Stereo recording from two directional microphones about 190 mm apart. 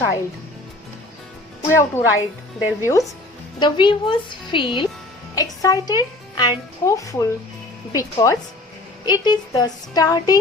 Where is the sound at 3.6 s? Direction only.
25° left (ahead or behind).